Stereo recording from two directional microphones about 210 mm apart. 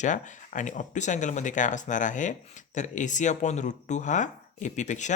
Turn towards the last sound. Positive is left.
turn(degrees=35)  # may be behind; listen again after turning